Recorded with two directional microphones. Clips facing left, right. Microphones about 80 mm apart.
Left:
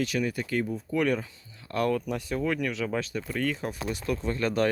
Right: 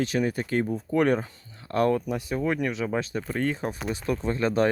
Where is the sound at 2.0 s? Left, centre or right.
Centre.